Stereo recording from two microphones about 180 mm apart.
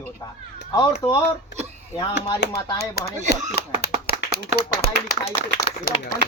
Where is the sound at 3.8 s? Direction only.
60° left (ahead or behind).